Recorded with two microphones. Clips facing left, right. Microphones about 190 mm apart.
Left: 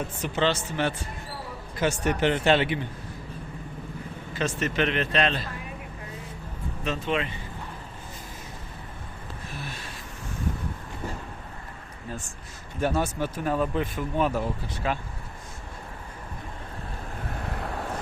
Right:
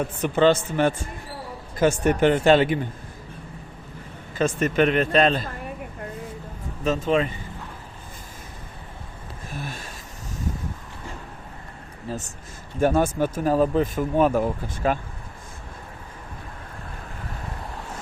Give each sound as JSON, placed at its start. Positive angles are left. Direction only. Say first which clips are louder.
{"t": 0.2, "sound": "speech", "louder": "right 8 dB", "side_deg": -50}
{"t": 4.4, "sound": "speech", "louder": "right 6 dB", "side_deg": -50}
{"t": 6.8, "sound": "speech", "louder": "right 6 dB", "side_deg": -45}
{"t": 9.5, "sound": "a sound", "louder": "right 6 dB", "side_deg": -45}
{"t": 12.0, "sound": "speech", "louder": "right 5 dB", "side_deg": -40}